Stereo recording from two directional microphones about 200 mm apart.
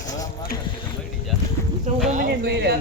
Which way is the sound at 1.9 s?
35° right (ahead or behind).